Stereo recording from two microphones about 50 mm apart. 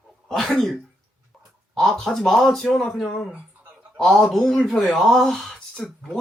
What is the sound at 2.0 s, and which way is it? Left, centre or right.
Speech, centre.